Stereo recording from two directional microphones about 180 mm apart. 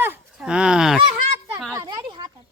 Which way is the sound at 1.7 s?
15° right (ahead or behind).